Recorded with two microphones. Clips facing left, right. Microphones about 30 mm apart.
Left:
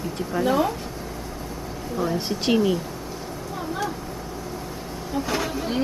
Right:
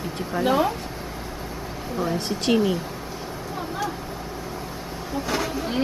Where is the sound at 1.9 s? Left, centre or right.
Centre.